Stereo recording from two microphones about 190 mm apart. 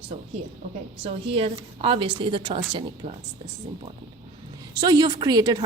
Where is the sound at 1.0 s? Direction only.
30° right (ahead or behind).